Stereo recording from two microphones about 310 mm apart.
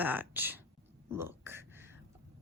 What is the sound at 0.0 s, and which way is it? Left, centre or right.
Speech, centre.